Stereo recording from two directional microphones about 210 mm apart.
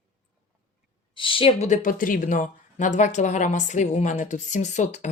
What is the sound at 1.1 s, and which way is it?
Speech, 25° left (ahead or behind).